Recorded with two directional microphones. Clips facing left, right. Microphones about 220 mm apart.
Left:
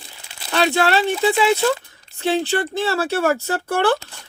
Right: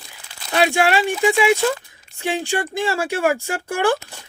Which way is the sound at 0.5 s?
10° right (ahead or behind).